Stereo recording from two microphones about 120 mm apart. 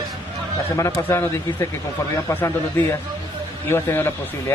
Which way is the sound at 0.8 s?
25° left (ahead or behind).